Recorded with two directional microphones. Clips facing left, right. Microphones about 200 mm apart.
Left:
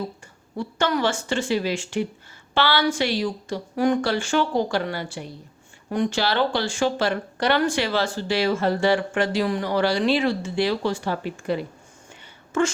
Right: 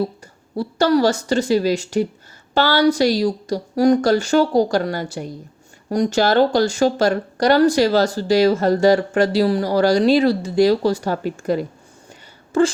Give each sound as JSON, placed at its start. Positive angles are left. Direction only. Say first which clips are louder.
{"t": 0.5, "sound": "speech", "louder": "right 7 dB", "side_deg": -35}